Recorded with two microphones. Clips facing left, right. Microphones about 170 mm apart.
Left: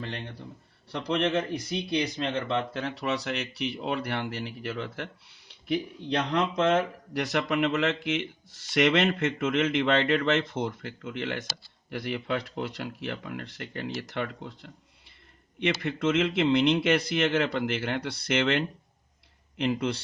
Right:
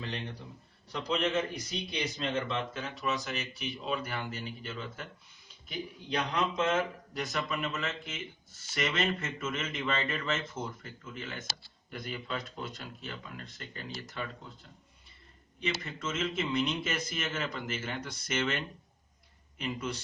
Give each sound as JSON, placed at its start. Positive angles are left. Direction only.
{"t": 0.9, "sound": "a man's voice", "side_deg": 65}